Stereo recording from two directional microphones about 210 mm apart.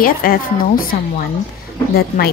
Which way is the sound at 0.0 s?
45° left (ahead or behind).